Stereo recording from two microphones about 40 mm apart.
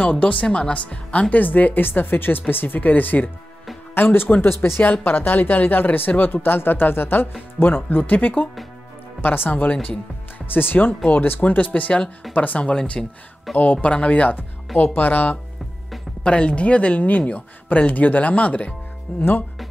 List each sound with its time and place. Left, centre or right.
0.2 s speech: left
1.3 s speech: left
3.9 s speech: left
4.6 s speech: left
9.2 s speech: left
9.5 s speech: left
10.4 s speech: left
12.6 s speech: left
13.0 s speech: centre
13.6 s speech: left
16.3 s speech: left